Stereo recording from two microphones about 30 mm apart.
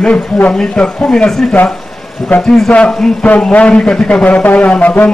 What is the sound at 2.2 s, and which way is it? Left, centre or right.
Speech, centre.